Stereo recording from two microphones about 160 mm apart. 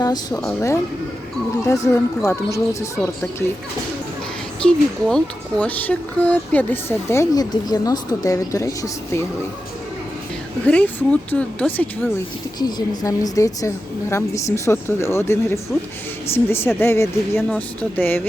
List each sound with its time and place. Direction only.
0.0 s speech: 25° left (ahead or behind)
1.6 s speech: 20° left (ahead or behind)
4.6 s speech: 5° left (ahead or behind)
10.7 s speech: 5° left (ahead or behind)
12.5 s speech: 25° left (ahead or behind)